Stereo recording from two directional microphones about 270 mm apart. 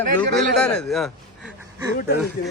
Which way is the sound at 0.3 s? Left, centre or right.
Centre.